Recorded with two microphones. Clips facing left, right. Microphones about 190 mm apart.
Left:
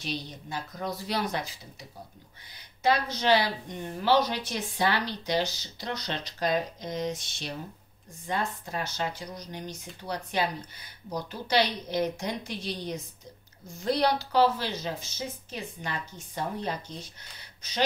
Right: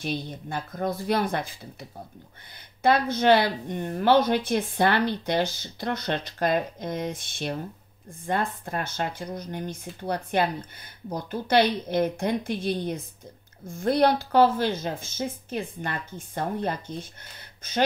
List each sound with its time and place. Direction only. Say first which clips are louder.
0.0 s speech: right 5 dB; 55° right (ahead or behind)